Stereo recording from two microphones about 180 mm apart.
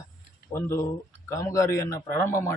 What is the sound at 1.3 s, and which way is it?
Speech, 15° left (ahead or behind).